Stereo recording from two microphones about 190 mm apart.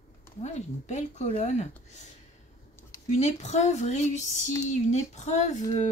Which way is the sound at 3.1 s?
35° left (ahead or behind).